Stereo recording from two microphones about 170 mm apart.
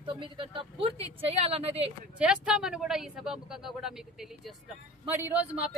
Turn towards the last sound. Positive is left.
turn(degrees=-10)  # may be behind; listen again after turning